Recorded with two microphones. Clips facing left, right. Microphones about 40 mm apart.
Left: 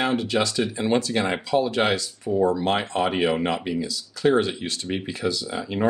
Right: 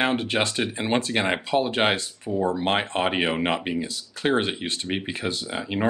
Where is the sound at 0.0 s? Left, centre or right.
Right.